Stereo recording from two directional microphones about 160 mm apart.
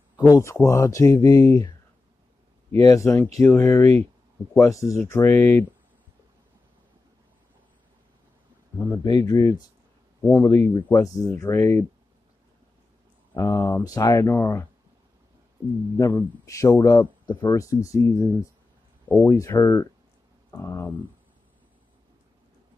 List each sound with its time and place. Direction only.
0.3 s speech: 15° left (ahead or behind)
2.8 s speech: 20° left (ahead or behind)
8.8 s speech: 20° left (ahead or behind)
10.7 s speech: 25° left (ahead or behind)
13.4 s speech: 15° left (ahead or behind)
16.0 s speech: 15° left (ahead or behind)